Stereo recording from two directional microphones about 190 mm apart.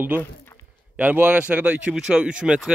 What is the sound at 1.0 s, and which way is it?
Speech, 10° right (ahead or behind).